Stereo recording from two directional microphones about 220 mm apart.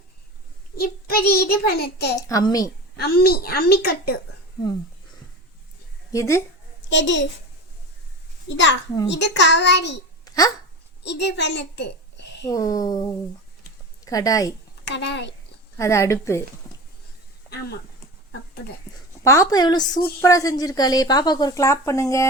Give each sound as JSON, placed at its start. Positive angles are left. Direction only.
{"t": 0.8, "sound": "a child's voice", "side_deg": 45}
{"t": 2.2, "sound": "speech", "side_deg": 15}
{"t": 3.0, "sound": "a child's voice", "side_deg": 45}
{"t": 6.1, "sound": "speech", "side_deg": 15}
{"t": 6.9, "sound": "a child's voice", "side_deg": 55}
{"t": 8.4, "sound": "a child's voice", "side_deg": 55}
{"t": 10.2, "sound": "a sound", "side_deg": 15}
{"t": 11.0, "sound": "a child's voice", "side_deg": 50}
{"t": 12.5, "sound": "speech", "side_deg": 15}
{"t": 14.0, "sound": "a woman's voice", "side_deg": 15}
{"t": 14.8, "sound": "a child's voice", "side_deg": 55}
{"t": 15.8, "sound": "speech", "side_deg": 15}
{"t": 19.2, "sound": "speech", "side_deg": 15}